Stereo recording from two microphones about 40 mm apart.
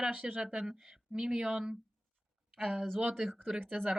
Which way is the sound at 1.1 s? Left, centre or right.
Centre.